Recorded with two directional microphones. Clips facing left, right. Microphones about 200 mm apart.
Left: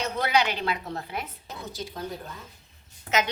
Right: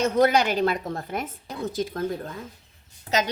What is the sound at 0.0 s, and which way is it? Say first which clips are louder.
A woman's voice: right 6 dB; 45° right (ahead or behind).